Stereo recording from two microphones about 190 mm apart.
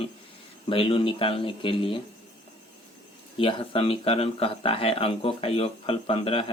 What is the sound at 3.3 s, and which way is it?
Speech, 30° left (ahead or behind).